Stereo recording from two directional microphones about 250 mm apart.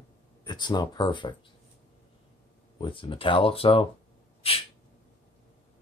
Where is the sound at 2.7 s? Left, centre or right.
Centre.